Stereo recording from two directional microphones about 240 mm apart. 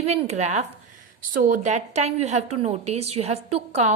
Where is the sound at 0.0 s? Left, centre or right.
Right.